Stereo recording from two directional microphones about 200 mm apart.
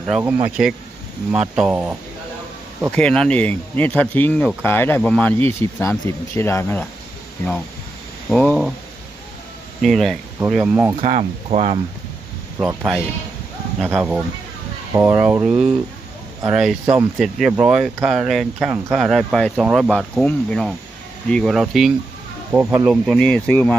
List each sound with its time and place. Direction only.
0.1 s speech: centre (ahead or behind)
8.3 s speech: centre (ahead or behind)
9.8 s speech: centre (ahead or behind)
11.0 s speech: 35° right (ahead or behind)
12.6 s speech: centre (ahead or behind)